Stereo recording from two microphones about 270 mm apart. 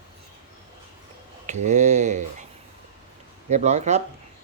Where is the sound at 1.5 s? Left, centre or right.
Right.